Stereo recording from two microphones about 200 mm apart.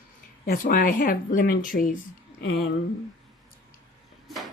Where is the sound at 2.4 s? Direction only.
55° left (ahead or behind).